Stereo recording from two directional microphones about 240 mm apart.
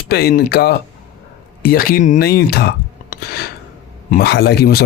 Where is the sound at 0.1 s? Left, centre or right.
Left.